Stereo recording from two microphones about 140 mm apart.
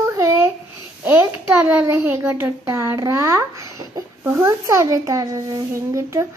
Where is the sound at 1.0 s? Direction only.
10° right (ahead or behind).